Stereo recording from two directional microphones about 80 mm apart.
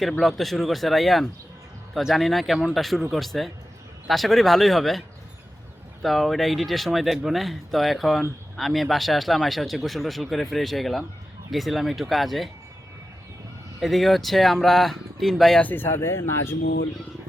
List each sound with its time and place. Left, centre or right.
0.0 s speech: centre
13.7 s speech: centre
15.6 s speech: left